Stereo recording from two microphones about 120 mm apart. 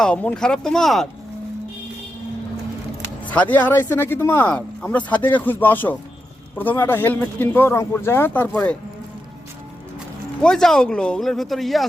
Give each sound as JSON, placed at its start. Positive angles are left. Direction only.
{"t": 0.0, "sound": "speech", "side_deg": 10}
{"t": 3.3, "sound": "speech", "side_deg": 15}
{"t": 10.4, "sound": "speech", "side_deg": 5}